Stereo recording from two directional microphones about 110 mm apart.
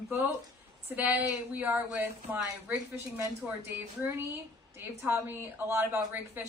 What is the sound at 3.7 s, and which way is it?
A woman's voice, 20° right (ahead or behind).